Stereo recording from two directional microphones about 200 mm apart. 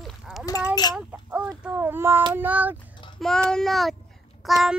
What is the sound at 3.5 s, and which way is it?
Speech, centre (ahead or behind).